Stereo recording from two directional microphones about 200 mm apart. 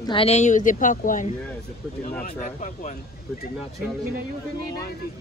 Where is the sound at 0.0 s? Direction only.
25° left (ahead or behind).